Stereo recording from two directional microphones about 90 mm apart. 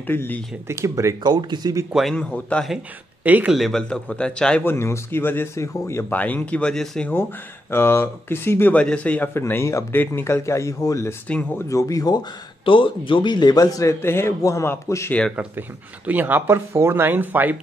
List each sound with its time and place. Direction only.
0.0 s speech: 20° left (ahead or behind)
0.7 s speech: 35° right (ahead or behind)
1.2 s a man's voice: 55° right (ahead or behind)
2.1 s a man's voice: 15° left (ahead or behind)
3.3 s speech: 20° right (ahead or behind)
3.5 s a man's voice: 5° left (ahead or behind)
4.6 s speech: 30° left (ahead or behind)
6.0 s a man's voice: 20° left (ahead or behind)
7.7 s speech: 25° left (ahead or behind)
8.7 s a man's voice: 15° left (ahead or behind)
9.3 s speech: 30° left (ahead or behind); by 12.3 s 45° left (ahead or behind)
12.6 s speech: 70° left (ahead or behind); by 13.9 s 40° left (ahead or behind)
14.0 s speech: 25° left (ahead or behind)
16.1 s speech: 20° right (ahead or behind)